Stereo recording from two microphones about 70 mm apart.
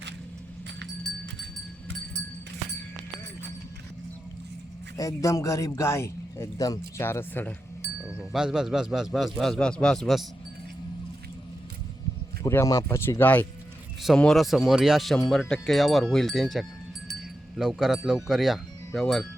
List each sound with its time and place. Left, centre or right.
4.9 s speech: left
6.6 s speech: left
7.0 s speech: left
8.3 s a man's voice: centre
12.4 s speech: left
14.2 s a man's voice: centre